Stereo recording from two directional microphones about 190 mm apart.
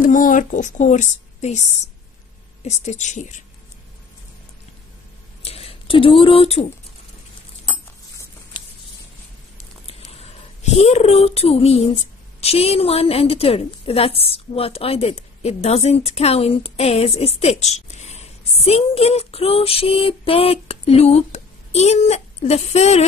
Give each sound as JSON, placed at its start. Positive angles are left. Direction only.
{"t": 0.0, "sound": "a woman's voice", "side_deg": 45}
{"t": 5.4, "sound": "a sound", "side_deg": 30}
{"t": 9.8, "sound": "speech", "side_deg": 30}